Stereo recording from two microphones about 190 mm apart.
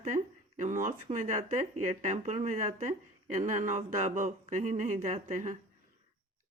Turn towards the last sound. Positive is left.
turn(degrees=-40)  # may be behind; listen again after turning